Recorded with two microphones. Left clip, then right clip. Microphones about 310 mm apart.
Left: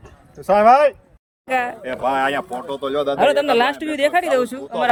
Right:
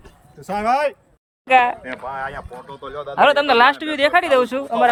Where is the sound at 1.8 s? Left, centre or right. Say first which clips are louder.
Left 8 dB; left.